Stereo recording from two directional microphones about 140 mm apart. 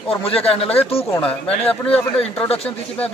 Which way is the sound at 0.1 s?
45° left (ahead or behind).